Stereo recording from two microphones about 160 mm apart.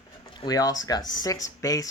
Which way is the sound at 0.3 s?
25° left (ahead or behind).